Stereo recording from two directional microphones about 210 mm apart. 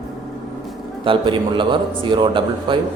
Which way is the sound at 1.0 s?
25° right (ahead or behind).